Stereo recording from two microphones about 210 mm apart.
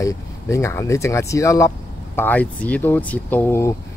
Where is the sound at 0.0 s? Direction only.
15° left (ahead or behind).